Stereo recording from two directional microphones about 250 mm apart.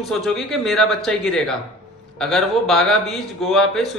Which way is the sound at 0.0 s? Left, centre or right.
Centre.